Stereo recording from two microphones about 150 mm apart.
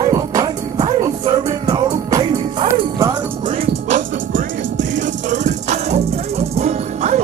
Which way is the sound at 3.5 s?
50° right (ahead or behind).